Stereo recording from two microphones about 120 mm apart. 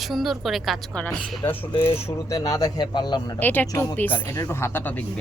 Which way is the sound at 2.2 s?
30° left (ahead or behind).